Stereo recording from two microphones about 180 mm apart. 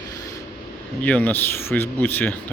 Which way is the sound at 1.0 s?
10° left (ahead or behind).